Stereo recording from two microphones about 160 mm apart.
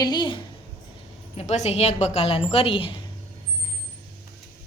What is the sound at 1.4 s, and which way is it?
A woman's voice, 45° left (ahead or behind).